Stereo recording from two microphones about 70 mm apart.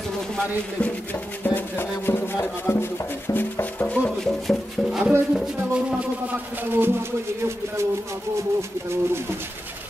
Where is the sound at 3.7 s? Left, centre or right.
Centre.